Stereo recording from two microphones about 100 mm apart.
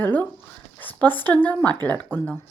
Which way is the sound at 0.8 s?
15° left (ahead or behind).